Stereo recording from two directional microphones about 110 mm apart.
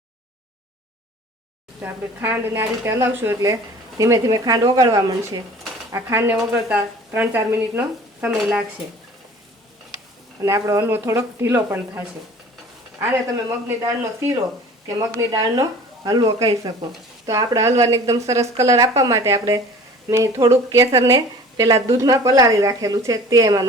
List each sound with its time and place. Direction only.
1.8 s speech: 20° right (ahead or behind)
10.4 s speech: 30° right (ahead or behind)